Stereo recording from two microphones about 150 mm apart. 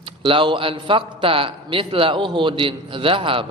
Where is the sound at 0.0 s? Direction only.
35° right (ahead or behind).